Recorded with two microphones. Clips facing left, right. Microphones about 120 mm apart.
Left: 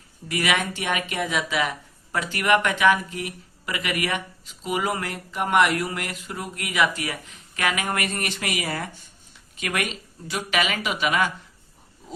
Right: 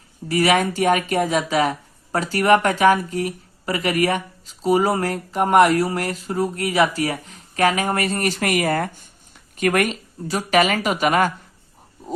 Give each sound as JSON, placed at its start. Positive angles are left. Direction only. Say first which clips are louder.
{"t": 0.3, "sound": "speech", "louder": "right 7 dB", "side_deg": -35}